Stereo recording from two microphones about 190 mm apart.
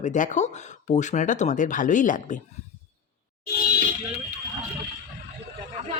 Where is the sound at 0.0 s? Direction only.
40° left (ahead or behind).